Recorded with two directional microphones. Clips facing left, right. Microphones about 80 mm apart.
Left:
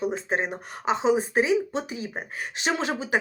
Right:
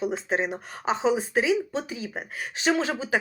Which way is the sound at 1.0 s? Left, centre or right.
Left.